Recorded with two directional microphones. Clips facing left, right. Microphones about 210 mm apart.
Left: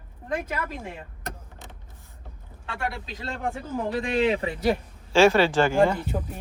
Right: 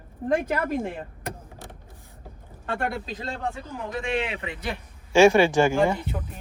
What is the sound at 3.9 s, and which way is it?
Speech, 35° left (ahead or behind).